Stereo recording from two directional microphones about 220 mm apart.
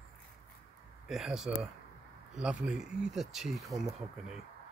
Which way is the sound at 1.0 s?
Centre (ahead or behind).